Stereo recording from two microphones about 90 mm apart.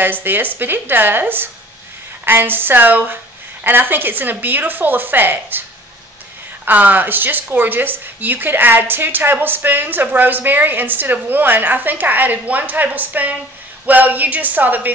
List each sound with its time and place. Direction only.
0.0 s speech: 20° right (ahead or behind)
6.6 s speech: 20° right (ahead or behind)